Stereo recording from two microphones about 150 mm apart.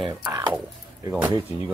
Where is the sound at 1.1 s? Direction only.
10° right (ahead or behind).